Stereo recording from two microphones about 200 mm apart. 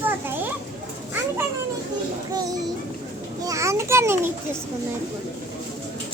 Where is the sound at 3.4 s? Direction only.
15° right (ahead or behind).